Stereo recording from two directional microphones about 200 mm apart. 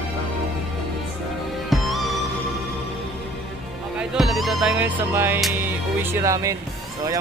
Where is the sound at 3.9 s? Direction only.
Centre (ahead or behind).